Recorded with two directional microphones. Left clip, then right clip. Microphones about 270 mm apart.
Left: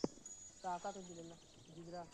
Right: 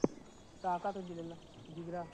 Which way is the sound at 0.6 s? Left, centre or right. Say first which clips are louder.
Right 8 dB; centre.